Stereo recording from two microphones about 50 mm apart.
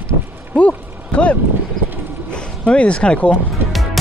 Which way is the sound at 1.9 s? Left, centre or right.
Right.